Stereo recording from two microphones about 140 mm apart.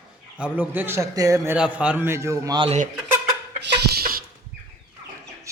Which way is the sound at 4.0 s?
90° right.